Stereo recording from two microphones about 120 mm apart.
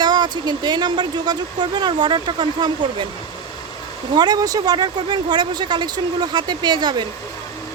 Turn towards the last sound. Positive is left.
turn(degrees=-40)  # may be behind; listen again after turning